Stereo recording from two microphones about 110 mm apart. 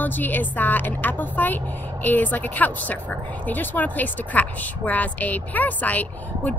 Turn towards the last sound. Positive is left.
turn(degrees=15)  # may be behind; listen again after turning